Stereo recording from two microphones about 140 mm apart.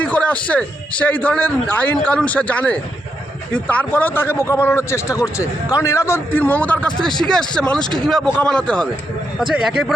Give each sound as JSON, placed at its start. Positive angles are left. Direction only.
{"t": 0.0, "sound": "speech", "side_deg": 10}
{"t": 9.6, "sound": "speech", "side_deg": -5}